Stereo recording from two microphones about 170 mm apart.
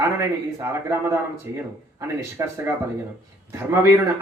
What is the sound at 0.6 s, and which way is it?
A man's voice, 15° right (ahead or behind).